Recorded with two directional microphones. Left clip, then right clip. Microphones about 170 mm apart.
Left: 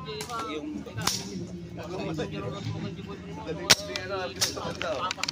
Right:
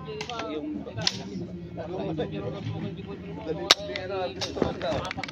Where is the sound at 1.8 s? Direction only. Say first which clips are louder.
Right 2 dB; 30° left (ahead or behind).